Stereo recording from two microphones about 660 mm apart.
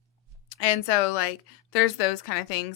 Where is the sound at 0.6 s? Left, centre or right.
Left.